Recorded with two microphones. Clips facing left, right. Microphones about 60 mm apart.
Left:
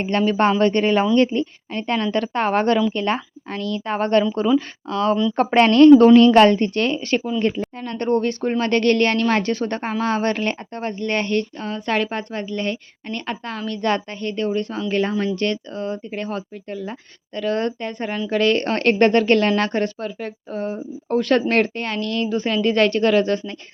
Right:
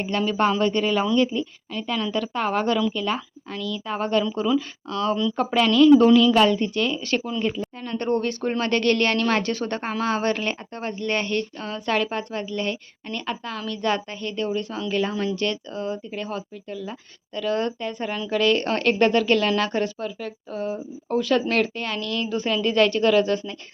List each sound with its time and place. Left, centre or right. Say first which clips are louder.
0.3 s a woman's voice: left 4 dB; left
4.5 s a woman's voice: left 4 dB; left
5.4 s a woman's voice: left 5 dB; left